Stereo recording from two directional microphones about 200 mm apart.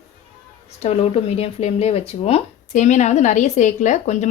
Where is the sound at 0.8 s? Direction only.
30° left (ahead or behind).